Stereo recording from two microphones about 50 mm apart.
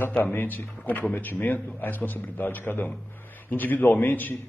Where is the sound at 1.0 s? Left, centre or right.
Left.